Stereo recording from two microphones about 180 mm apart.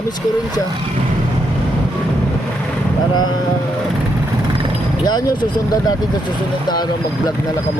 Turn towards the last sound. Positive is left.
turn(degrees=25)  # may be behind; listen again after turning